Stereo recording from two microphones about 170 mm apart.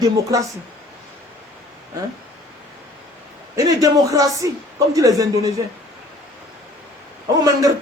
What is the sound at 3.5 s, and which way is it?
Speech, 20° right (ahead or behind).